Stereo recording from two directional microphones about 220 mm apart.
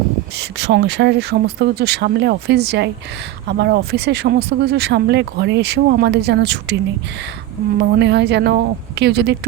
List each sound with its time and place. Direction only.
0.3 s speech: 50° right (ahead or behind)
7.8 s speech: 50° right (ahead or behind)